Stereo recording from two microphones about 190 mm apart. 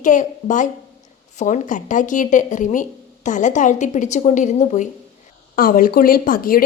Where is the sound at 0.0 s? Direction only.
40° left (ahead or behind).